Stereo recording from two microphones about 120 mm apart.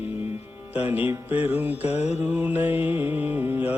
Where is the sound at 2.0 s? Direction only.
15° right (ahead or behind).